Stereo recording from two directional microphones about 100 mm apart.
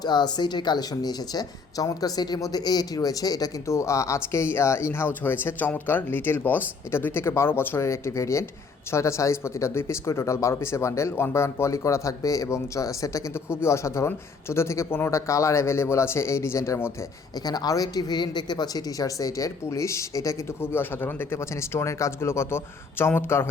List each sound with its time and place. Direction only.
0.0 s speech: 45° left (ahead or behind); by 17.1 s 25° left (ahead or behind)
17.3 s speech: 40° left (ahead or behind); by 23.5 s 25° left (ahead or behind)